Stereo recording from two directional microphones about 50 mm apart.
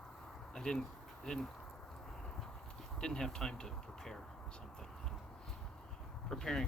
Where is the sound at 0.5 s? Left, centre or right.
Centre.